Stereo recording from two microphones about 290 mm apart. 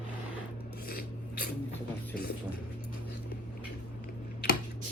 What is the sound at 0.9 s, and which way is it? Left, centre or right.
Filing, left.